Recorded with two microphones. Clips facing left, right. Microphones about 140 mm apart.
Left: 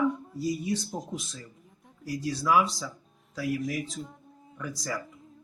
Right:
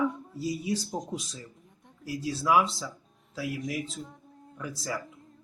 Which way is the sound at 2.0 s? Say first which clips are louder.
Left 1 dB; 5° right (ahead or behind).